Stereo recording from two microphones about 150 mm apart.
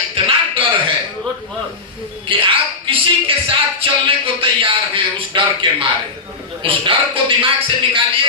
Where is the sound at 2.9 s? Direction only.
35° right (ahead or behind).